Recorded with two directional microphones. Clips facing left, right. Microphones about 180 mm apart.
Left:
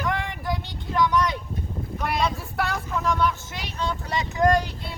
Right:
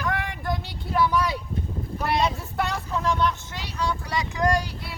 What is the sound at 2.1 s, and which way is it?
Vehicle, 20° right (ahead or behind).